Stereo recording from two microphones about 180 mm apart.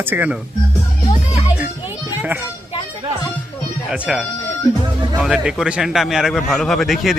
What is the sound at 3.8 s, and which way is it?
A man's voice, 5° right (ahead or behind).